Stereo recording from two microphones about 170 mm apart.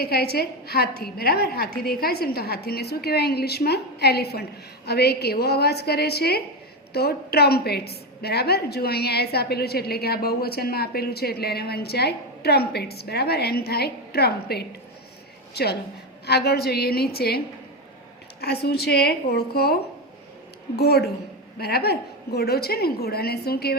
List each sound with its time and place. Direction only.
0.0 s a woman's voice: 70° left (ahead or behind)